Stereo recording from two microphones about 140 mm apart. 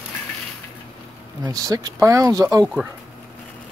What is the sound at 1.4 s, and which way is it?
Speech, 25° right (ahead or behind).